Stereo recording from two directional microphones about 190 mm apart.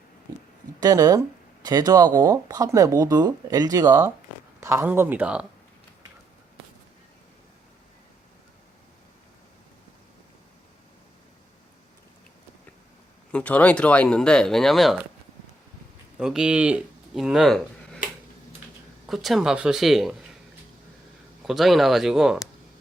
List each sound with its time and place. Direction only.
0.8 s speech: 20° right (ahead or behind)
13.3 s speech: 5° left (ahead or behind)
16.1 s speech: 5° right (ahead or behind)
19.0 s speech: centre (ahead or behind)
21.4 s speech: centre (ahead or behind)